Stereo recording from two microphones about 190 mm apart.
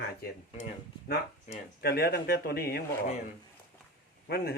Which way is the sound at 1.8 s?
55° left (ahead or behind).